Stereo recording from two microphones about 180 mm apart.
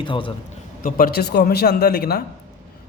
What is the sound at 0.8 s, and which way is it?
A man's voice, 55° left (ahead or behind).